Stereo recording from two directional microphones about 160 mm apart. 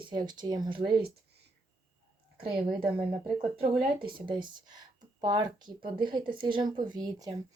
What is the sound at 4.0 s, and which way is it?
Speech, 30° right (ahead or behind).